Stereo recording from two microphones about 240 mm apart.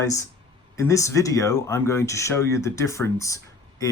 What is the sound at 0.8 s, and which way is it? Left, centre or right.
Speech, centre.